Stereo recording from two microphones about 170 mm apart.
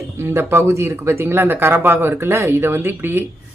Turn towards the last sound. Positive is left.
turn(degrees=-15)  # may be behind; listen again after turning